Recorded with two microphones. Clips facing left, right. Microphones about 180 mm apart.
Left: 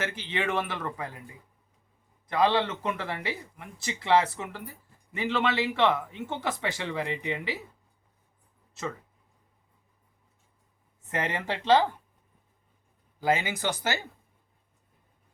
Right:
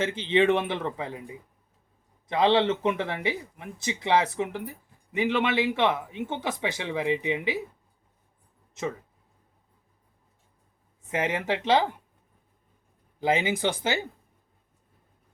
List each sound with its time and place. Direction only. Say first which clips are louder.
0.0 s speech: right 8 dB; 25° right (ahead or behind)
11.1 s speech: right 4 dB; 10° right (ahead or behind)
13.1 s speech: right 2 dB; 20° right (ahead or behind)